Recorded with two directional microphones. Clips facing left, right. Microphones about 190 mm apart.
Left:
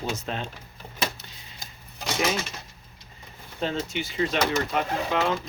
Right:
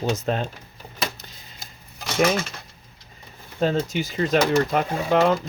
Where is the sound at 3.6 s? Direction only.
40° right (ahead or behind).